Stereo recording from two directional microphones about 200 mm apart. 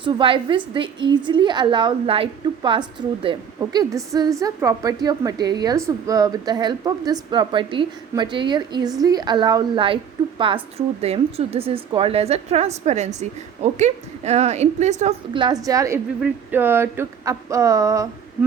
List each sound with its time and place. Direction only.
0.0 s a woman's voice: 25° right (ahead or behind)
15.4 s speech: 20° right (ahead or behind)